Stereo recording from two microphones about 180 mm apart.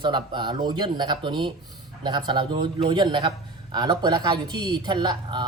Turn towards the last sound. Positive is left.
turn(degrees=-25)  # may be behind; listen again after turning